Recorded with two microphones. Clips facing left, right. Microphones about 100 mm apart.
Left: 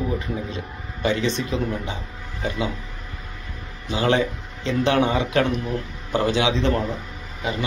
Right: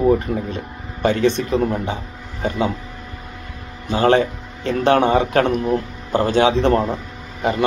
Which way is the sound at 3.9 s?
45° right (ahead or behind).